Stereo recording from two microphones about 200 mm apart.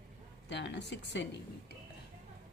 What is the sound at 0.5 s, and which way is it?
Speech, 60° left (ahead or behind).